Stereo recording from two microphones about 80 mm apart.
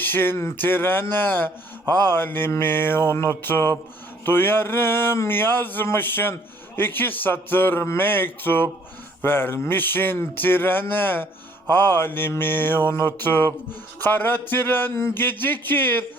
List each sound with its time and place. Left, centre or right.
0.0 s speech: left